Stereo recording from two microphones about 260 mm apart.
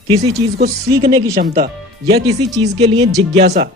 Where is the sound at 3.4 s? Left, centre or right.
Right.